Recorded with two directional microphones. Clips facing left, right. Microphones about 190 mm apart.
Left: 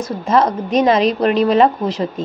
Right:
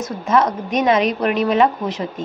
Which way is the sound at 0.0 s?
30° left (ahead or behind).